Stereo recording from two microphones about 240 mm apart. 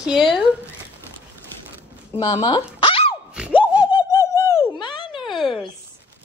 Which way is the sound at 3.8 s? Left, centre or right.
Centre.